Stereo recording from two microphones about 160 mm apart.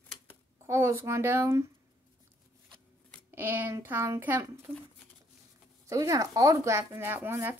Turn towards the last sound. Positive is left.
turn(degrees=-15)  # may be behind; listen again after turning